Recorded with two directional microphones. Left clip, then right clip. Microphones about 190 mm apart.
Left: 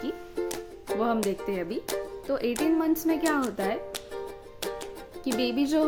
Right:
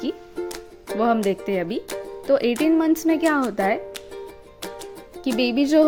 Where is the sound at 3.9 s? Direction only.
Centre (ahead or behind).